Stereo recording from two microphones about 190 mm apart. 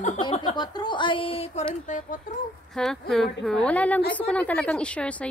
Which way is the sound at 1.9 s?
40° left (ahead or behind).